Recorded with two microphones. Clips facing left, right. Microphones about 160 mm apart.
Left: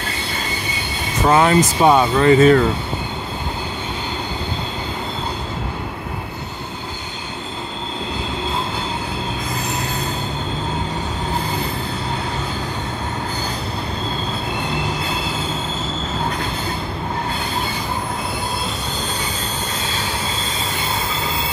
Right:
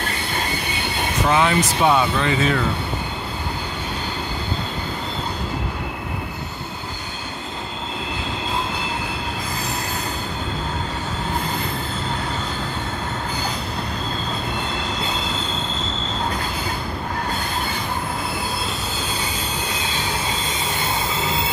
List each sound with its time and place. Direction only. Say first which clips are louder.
1.2 s speech: left 5 dB; 45° left (ahead or behind)